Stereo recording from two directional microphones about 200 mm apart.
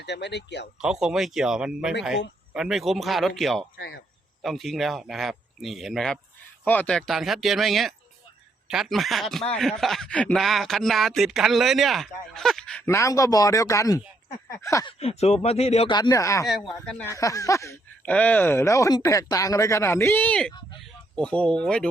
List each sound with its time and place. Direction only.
0.0 s speech: 60° left (ahead or behind)
0.8 s speech: 5° right (ahead or behind)
3.8 s speech: 55° left (ahead or behind)
4.4 s speech: centre (ahead or behind); by 14.9 s 15° left (ahead or behind)
14.9 s speech: 30° left (ahead or behind); by 16.5 s 15° left (ahead or behind)
16.5 s speech: centre (ahead or behind)